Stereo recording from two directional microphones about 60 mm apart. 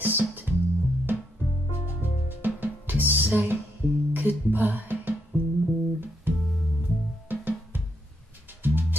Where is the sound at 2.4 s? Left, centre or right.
Right.